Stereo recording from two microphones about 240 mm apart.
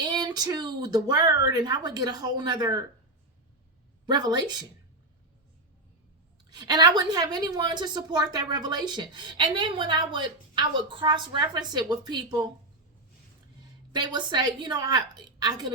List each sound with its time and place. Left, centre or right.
0.0 s a sound: centre
1.6 s a woman's voice: centre
4.0 s a woman's voice: centre
6.5 s a woman's voice: centre
13.9 s a woman's voice: centre